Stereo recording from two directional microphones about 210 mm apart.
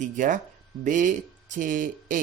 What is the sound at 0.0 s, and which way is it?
Speech, 35° right (ahead or behind).